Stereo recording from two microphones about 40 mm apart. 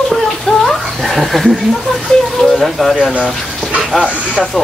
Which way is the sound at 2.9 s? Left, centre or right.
Right.